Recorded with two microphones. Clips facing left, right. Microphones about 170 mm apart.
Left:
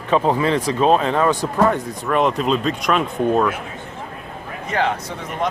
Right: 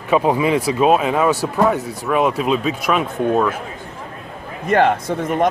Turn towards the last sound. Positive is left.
turn(degrees=-50)  # may be behind; listen again after turning